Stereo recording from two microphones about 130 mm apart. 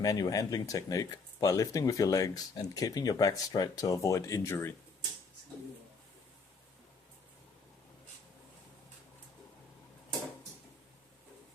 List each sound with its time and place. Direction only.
0.0 s speech: 30° left (ahead or behind)